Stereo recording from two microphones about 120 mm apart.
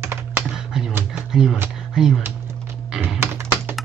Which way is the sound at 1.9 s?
5° right (ahead or behind).